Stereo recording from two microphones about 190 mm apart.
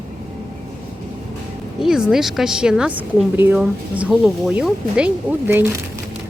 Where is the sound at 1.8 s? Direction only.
5° right (ahead or behind).